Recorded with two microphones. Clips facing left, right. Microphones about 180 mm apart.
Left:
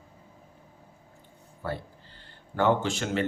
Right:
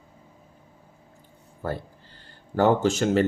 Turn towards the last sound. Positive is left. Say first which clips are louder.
# right 7 dB
turn(degrees=-40)  # may be behind; listen again after turning